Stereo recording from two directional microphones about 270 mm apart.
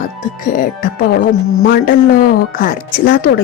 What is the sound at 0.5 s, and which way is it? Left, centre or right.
A woman's voice, left.